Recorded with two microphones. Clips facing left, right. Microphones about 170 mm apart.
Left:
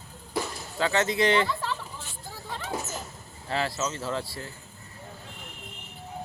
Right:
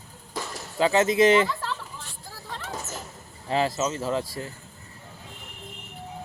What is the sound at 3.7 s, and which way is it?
Speech, 15° right (ahead or behind).